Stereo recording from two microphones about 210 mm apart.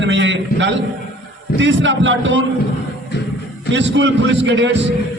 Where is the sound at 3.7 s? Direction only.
60° right (ahead or behind).